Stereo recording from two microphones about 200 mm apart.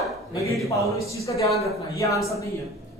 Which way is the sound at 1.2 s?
15° left (ahead or behind).